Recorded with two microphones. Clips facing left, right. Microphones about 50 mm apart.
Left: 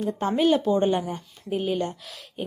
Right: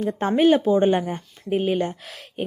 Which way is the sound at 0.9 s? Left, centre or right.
Right.